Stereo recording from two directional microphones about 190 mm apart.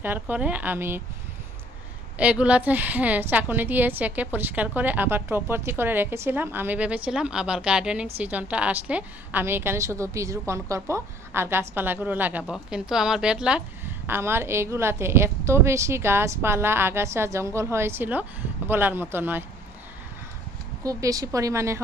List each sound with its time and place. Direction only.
0.0 s a woman's voice: 10° right (ahead or behind)
2.1 s a woman's voice: 5° right (ahead or behind)
20.8 s a woman's voice: 15° right (ahead or behind)